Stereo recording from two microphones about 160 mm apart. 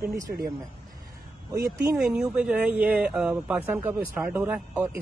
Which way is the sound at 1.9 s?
5° right (ahead or behind).